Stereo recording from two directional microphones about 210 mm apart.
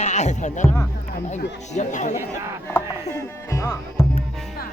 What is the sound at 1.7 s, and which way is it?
Speech, 35° left (ahead or behind).